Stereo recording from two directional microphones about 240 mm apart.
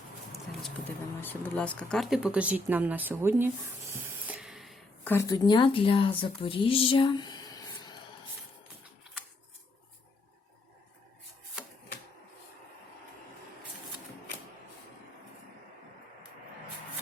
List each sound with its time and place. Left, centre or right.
1.2 s speech: centre